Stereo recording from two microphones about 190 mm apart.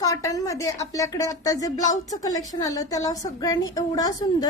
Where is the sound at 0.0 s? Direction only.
15° left (ahead or behind).